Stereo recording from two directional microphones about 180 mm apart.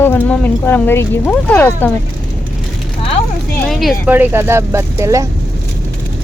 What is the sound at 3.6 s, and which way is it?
Speech, centre (ahead or behind).